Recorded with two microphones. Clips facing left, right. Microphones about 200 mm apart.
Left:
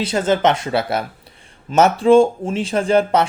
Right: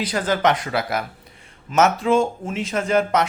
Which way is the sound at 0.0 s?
25° left (ahead or behind).